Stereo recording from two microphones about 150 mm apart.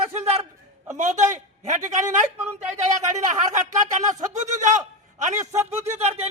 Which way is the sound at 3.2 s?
55° right (ahead or behind).